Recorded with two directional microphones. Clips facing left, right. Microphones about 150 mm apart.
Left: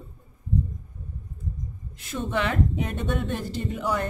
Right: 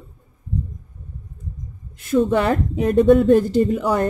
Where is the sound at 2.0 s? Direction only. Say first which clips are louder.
Right 10 dB; 40° right (ahead or behind).